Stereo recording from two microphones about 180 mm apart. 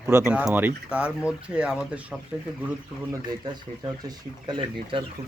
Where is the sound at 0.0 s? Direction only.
10° right (ahead or behind).